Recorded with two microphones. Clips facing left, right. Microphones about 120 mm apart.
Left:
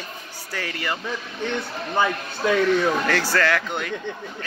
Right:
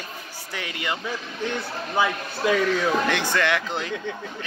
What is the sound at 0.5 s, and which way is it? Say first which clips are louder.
Speech: left 1 dB; 15° right (ahead or behind).